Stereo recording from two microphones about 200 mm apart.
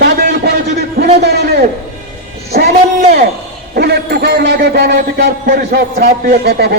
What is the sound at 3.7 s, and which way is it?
A man's voice, 50° right (ahead or behind).